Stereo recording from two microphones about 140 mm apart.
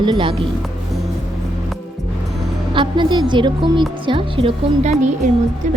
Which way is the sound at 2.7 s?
35° right (ahead or behind).